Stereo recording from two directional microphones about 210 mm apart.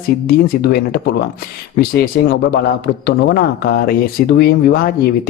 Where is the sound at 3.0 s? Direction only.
45° left (ahead or behind).